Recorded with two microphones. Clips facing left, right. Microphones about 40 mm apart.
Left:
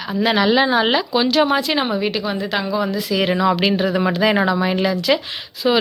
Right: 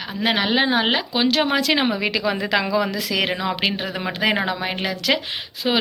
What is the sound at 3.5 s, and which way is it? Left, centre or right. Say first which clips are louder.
Speech: left 5 dB; right.